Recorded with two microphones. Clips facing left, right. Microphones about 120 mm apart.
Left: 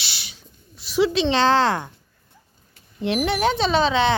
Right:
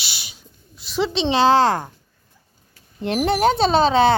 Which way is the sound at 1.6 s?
40° right (ahead or behind).